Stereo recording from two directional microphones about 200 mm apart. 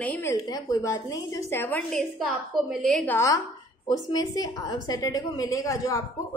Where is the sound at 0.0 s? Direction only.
10° left (ahead or behind).